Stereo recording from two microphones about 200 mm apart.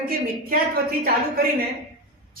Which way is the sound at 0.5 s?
45° right (ahead or behind).